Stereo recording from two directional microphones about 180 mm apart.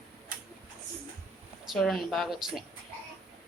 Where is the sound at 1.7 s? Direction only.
Centre (ahead or behind).